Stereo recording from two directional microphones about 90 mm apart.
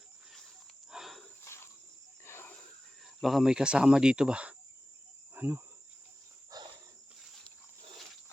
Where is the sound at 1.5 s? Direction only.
30° left (ahead or behind).